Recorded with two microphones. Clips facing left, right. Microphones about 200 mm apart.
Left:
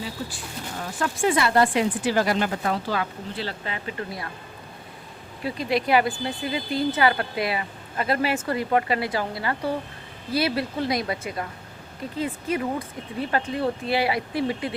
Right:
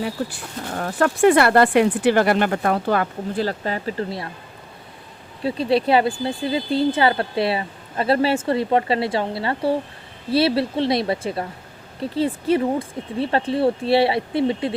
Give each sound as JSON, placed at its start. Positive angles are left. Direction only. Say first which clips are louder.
{"t": 0.8, "sound": "speech", "louder": "right 8 dB", "side_deg": -60}
{"t": 5.4, "sound": "speech", "louder": "right 6 dB", "side_deg": -30}